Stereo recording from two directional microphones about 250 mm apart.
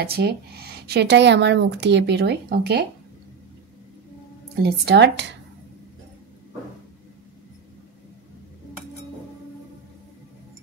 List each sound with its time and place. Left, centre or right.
0.0 s speech: right
4.6 s speech: right